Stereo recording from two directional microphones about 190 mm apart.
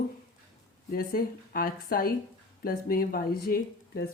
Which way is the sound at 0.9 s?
50° left (ahead or behind).